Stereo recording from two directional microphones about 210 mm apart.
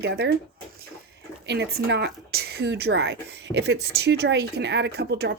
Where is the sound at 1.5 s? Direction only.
55° right (ahead or behind).